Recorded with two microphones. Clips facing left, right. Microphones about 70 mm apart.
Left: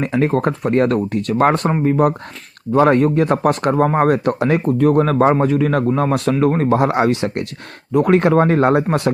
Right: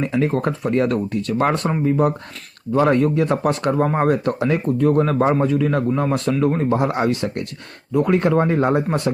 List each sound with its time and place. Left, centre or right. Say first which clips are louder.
0.0 s speech: left 3 dB; left
6.4 s speech: left 4 dB; left